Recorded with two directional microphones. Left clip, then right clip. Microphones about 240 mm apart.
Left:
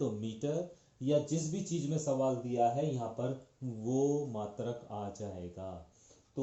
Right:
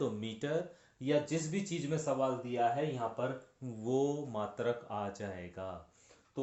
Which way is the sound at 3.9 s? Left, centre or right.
Right.